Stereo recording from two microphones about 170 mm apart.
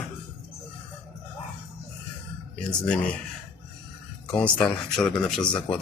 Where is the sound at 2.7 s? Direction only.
5° left (ahead or behind).